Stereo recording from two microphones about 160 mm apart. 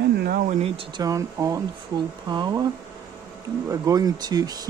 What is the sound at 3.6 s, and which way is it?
Speech, 20° right (ahead or behind).